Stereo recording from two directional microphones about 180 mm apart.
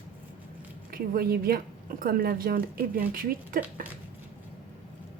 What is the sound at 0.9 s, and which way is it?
A woman's voice, 55° right (ahead or behind).